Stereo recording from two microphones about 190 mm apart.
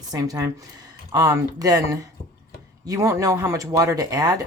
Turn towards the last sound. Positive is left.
turn(degrees=-20)  # may be behind; listen again after turning